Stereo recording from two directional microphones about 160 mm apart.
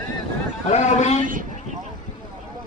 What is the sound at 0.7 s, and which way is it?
Speech, 45° left (ahead or behind).